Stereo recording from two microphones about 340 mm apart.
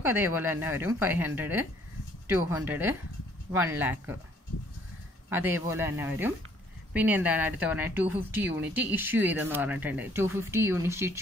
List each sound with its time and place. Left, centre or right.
0.0 s a woman's voice: centre
5.3 s a woman's voice: centre